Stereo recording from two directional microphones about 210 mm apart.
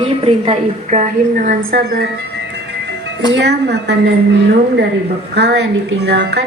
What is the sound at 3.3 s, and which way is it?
Speech, 55° right (ahead or behind).